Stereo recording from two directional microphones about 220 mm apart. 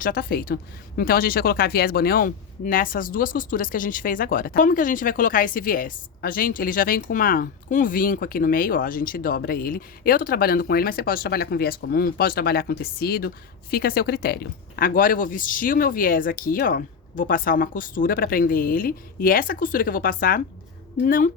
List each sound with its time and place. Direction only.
0.0 s speech: 40° left (ahead or behind)